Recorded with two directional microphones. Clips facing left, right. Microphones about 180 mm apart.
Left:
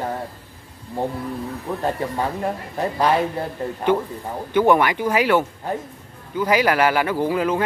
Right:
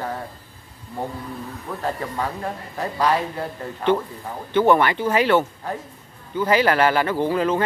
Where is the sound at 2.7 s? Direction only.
20° left (ahead or behind).